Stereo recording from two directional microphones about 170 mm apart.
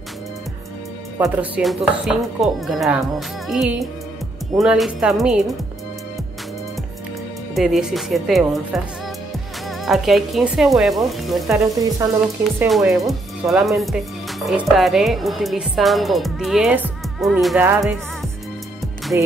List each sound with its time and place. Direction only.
1.1 s speech: 15° right (ahead or behind)
7.5 s speech: centre (ahead or behind)
11.6 s sizzle: 20° right (ahead or behind)
12.6 s speech: centre (ahead or behind)